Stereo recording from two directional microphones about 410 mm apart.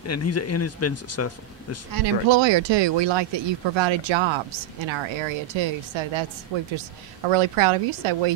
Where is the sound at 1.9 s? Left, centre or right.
Right.